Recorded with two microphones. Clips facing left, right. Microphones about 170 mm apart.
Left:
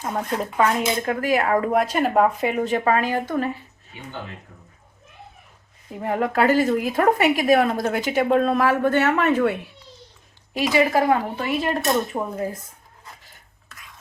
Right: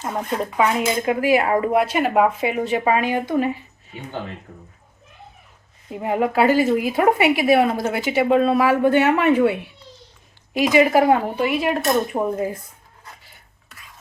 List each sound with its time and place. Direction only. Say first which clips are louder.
0.1 s a woman's voice: right 1 dB; 5° right (ahead or behind)
5.9 s a woman's voice: right 2 dB; 10° right (ahead or behind)